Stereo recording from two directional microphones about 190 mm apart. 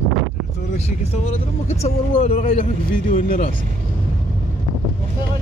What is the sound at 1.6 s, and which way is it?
Speech, 35° left (ahead or behind).